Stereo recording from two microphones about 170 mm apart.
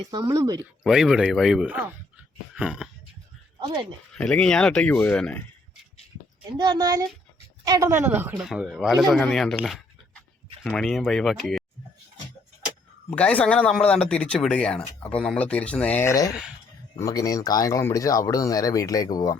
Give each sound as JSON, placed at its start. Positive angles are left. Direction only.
{"t": 0.1, "sound": "speech", "side_deg": -20}
{"t": 0.9, "sound": "speech", "side_deg": -5}
{"t": 3.6, "sound": "speech", "side_deg": -30}
{"t": 4.1, "sound": "speech", "side_deg": 5}
{"t": 6.6, "sound": "a woman's voice", "side_deg": -25}
{"t": 13.1, "sound": "speech", "side_deg": 5}